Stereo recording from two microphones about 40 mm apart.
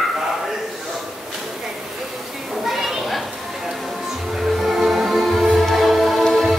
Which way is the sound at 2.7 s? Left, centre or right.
Centre.